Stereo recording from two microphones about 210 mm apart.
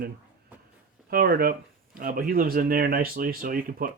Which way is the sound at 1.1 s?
45° right (ahead or behind).